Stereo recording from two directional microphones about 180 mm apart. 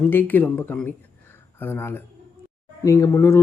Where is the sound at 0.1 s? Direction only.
10° left (ahead or behind).